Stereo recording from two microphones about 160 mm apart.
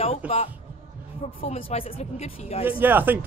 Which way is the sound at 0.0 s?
40° left (ahead or behind).